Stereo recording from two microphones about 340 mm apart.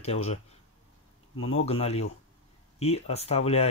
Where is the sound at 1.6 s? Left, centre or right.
Centre.